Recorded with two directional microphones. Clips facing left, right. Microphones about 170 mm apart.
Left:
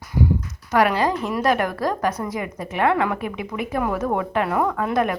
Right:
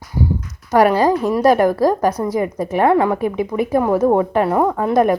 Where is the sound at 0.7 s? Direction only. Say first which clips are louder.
Right 6 dB; 40° right (ahead or behind).